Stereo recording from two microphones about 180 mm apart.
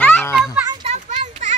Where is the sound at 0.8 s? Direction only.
40° right (ahead or behind).